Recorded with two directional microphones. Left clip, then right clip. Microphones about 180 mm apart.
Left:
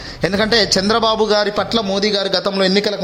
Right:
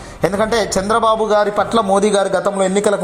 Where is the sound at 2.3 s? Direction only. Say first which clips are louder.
Even; 30° left (ahead or behind).